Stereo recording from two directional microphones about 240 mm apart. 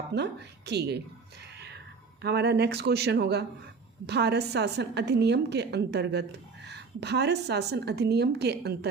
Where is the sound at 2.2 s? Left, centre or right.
Right.